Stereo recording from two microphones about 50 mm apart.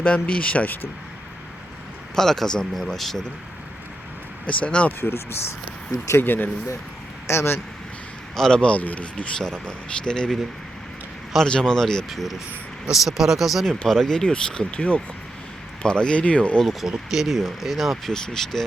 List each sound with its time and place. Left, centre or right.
0.0 s speech: left
2.1 s speech: centre
4.4 s speech: left
4.9 s speech: left
6.1 s speech: left
7.3 s speech: left
8.4 s speech: centre
9.4 s speech: centre
11.4 s speech: centre
12.1 s speech: centre
13.8 s speech: centre
14.8 s speech: left
16.8 s speech: centre